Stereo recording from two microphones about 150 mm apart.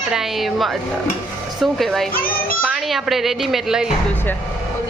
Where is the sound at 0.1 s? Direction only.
Centre (ahead or behind).